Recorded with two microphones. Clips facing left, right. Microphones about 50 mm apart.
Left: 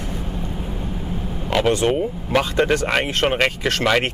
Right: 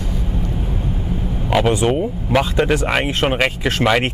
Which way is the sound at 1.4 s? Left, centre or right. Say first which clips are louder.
Right 2 dB; centre.